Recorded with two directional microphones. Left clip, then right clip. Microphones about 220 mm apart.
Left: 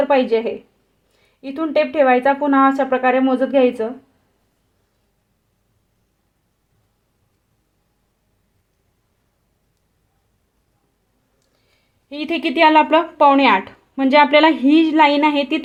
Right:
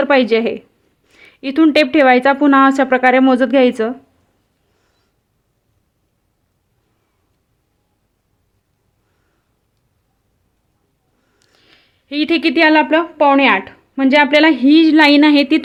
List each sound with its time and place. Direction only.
0.0 s a woman's voice: 30° right (ahead or behind)
11.3 s a sound: 40° right (ahead or behind)
12.0 s speech: 25° right (ahead or behind)